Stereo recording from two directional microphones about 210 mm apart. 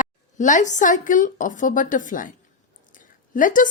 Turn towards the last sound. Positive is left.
turn(degrees=40)  # may be behind; listen again after turning